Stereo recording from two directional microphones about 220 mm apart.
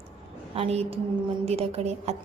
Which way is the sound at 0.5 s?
25° right (ahead or behind).